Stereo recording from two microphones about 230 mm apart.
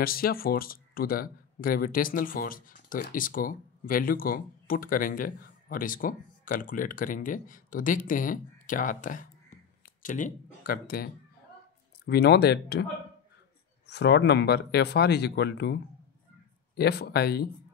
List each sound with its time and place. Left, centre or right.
0.0 s speech: left
12.1 s speech: left
13.8 s speech: left